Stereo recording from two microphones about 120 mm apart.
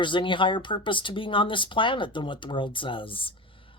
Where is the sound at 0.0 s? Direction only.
45° left (ahead or behind).